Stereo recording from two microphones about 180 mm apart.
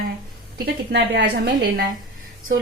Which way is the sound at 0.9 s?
65° right (ahead or behind).